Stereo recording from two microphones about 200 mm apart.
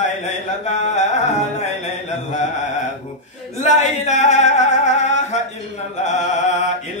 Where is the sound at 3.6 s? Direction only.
35° left (ahead or behind).